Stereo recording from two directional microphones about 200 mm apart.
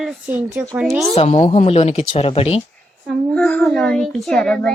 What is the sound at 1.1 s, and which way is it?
Speech, 30° left (ahead or behind).